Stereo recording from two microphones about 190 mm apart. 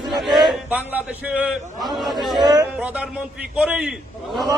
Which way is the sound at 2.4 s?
20° right (ahead or behind).